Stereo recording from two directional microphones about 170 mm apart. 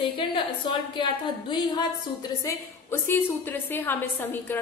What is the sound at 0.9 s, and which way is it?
A woman's voice, 25° left (ahead or behind).